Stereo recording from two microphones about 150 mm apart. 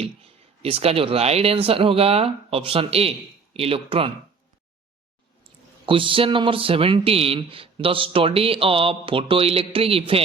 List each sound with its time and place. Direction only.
0.0 s speech: 40° right (ahead or behind)
5.8 s speech: 35° right (ahead or behind)